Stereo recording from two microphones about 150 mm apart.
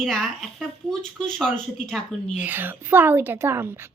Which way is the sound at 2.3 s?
10° right (ahead or behind).